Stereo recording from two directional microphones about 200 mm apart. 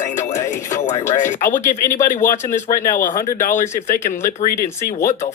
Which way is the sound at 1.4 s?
40° left (ahead or behind).